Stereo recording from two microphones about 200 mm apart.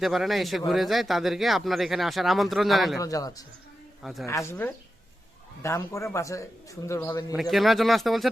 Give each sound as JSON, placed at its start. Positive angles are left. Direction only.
{"t": 0.0, "sound": "speech", "side_deg": 0}
{"t": 3.0, "sound": "speech", "side_deg": 15}
{"t": 4.0, "sound": "speech", "side_deg": 0}
{"t": 4.3, "sound": "speech", "side_deg": 15}
{"t": 7.5, "sound": "speech", "side_deg": 0}